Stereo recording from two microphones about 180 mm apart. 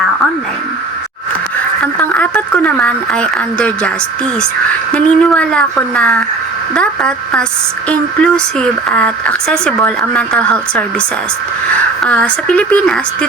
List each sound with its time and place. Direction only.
1.8 s speech: 5° left (ahead or behind)
12.0 s speech: 5° left (ahead or behind)